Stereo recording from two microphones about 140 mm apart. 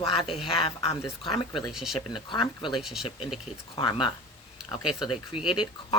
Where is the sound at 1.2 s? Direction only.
35° left (ahead or behind).